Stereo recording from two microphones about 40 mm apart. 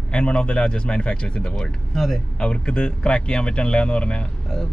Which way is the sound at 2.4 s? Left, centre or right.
Left.